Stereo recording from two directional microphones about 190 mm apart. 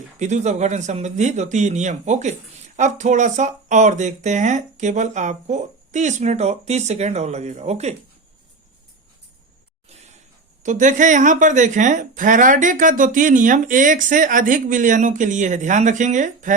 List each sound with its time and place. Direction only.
0.2 s speech: 40° right (ahead or behind)
10.6 s speech: 40° right (ahead or behind)